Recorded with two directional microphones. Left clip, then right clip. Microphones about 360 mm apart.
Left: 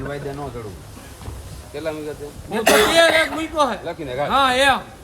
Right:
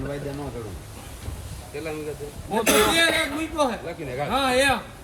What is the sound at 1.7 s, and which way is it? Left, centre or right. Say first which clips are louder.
Speech: left 5 dB; left.